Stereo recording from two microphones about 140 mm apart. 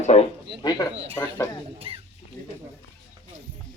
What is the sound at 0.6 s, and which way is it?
Speech, 25° left (ahead or behind).